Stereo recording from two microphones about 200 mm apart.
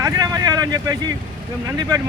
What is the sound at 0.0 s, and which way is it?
Vehicle, 20° right (ahead or behind).